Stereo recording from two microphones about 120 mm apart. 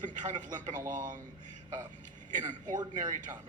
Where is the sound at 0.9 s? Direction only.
90° right.